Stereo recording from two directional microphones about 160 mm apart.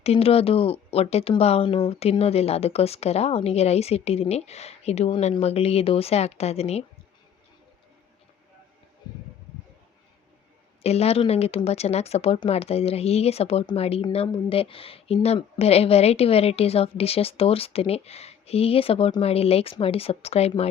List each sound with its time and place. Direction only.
0.0 s speech: 40° left (ahead or behind)
10.8 s speech: 40° left (ahead or behind)